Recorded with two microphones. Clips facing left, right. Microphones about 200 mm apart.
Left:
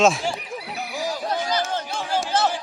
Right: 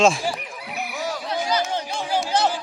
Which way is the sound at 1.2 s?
45° left (ahead or behind).